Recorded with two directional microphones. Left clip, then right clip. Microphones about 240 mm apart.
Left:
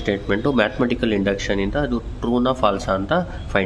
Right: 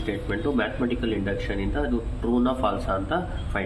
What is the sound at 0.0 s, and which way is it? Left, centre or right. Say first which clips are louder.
Speech: left 7 dB; left.